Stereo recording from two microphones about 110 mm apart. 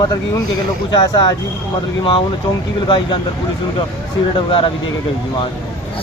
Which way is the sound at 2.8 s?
45° left (ahead or behind).